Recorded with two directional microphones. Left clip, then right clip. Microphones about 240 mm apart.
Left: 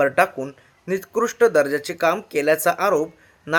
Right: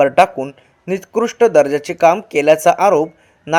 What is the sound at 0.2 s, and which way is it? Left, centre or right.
Speech, centre.